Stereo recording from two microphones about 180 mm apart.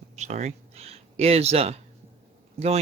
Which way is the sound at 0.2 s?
40° right (ahead or behind).